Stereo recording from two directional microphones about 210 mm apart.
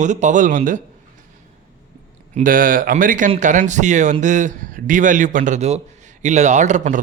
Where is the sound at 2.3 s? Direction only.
40° right (ahead or behind).